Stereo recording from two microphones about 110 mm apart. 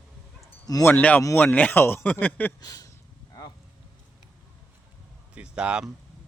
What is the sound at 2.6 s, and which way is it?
Speech, 35° left (ahead or behind).